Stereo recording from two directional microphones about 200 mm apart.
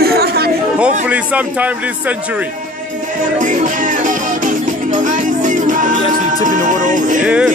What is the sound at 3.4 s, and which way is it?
Music, 40° right (ahead or behind).